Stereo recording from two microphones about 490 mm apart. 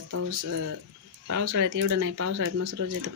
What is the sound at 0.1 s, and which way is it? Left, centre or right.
Speech, right.